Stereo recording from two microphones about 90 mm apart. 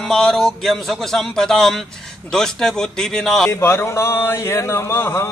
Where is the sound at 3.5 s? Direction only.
30° left (ahead or behind).